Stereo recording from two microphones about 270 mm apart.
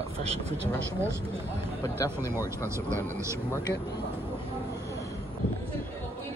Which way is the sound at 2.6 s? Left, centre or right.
Centre.